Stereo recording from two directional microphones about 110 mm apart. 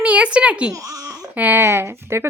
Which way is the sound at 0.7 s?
30° right (ahead or behind).